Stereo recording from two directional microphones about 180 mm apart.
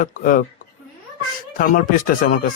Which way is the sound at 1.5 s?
50° left (ahead or behind).